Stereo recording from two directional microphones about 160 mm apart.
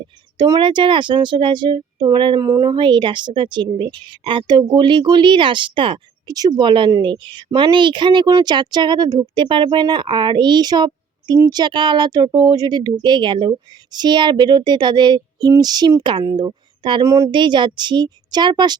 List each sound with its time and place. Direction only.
0.3 s speech: 25° right (ahead or behind)